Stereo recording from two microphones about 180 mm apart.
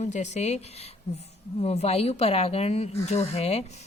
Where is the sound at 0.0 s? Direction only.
40° left (ahead or behind).